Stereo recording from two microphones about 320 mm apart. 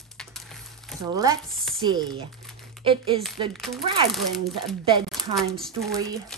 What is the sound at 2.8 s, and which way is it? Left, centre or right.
Speech, centre.